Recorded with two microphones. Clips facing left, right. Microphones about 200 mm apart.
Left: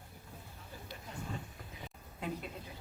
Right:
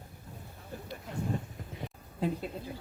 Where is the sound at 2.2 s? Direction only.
30° right (ahead or behind).